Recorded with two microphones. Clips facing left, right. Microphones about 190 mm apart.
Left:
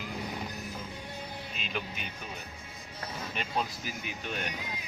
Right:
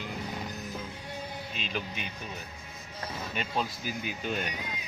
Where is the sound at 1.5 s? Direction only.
Centre (ahead or behind).